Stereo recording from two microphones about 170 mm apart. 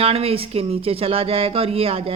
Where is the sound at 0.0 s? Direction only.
35° right (ahead or behind).